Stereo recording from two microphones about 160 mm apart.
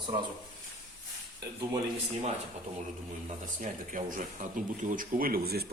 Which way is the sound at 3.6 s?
55° right (ahead or behind).